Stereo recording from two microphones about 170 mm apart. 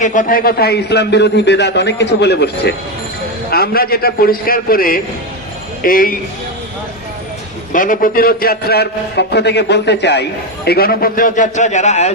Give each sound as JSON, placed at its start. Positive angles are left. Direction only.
{"t": 0.0, "sound": "a man's voice", "side_deg": 50}
{"t": 3.5, "sound": "a man's voice", "side_deg": 65}
{"t": 7.7, "sound": "a man's voice", "side_deg": 50}
{"t": 10.7, "sound": "a man's voice", "side_deg": 60}